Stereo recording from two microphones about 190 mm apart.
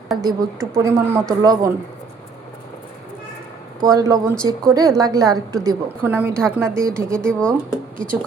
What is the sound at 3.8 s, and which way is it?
A woman's voice, 20° right (ahead or behind).